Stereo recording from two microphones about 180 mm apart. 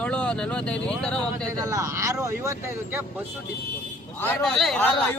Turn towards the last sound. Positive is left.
turn(degrees=5)  # may be behind; listen again after turning